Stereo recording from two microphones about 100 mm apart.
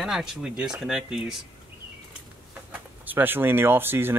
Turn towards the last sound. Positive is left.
turn(degrees=-20)  # may be behind; listen again after turning